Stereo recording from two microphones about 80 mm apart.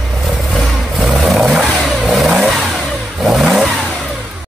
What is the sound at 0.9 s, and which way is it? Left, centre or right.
Vehicle, centre.